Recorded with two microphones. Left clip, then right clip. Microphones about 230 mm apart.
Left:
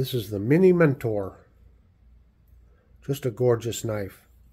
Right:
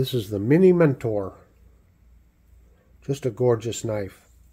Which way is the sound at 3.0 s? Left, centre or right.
Centre.